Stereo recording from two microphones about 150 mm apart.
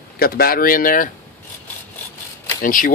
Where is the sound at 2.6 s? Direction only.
65° left (ahead or behind).